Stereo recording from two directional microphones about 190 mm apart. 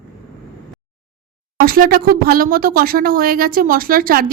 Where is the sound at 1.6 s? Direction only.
50° right (ahead or behind).